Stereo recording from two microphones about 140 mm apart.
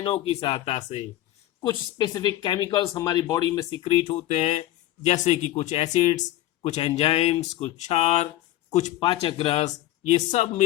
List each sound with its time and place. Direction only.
0.0 s speech: 45° left (ahead or behind)
1.6 s speech: 30° left (ahead or behind)
4.0 s speech: 55° left (ahead or behind)
9.2 s speech: 40° left (ahead or behind)
9.6 s speech: 55° left (ahead or behind)